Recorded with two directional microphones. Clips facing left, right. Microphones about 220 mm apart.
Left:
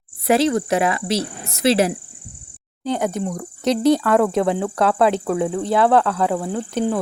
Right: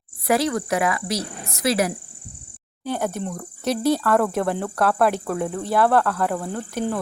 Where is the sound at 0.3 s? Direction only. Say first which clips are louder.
Left 4 dB; 25° left (ahead or behind).